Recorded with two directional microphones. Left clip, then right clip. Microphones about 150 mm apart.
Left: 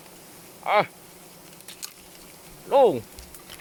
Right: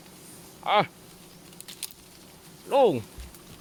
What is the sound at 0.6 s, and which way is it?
Speech, 30° right (ahead or behind).